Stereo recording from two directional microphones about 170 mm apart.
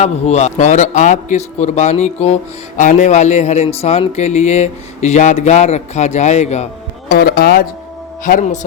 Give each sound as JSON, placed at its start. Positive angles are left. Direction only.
{"t": 0.0, "sound": "a man's voice", "side_deg": 40}
{"t": 7.1, "sound": "speech", "side_deg": 65}
{"t": 8.2, "sound": "speech", "side_deg": 50}